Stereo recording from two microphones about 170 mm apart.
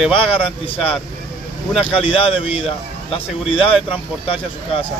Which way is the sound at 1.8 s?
30° left (ahead or behind).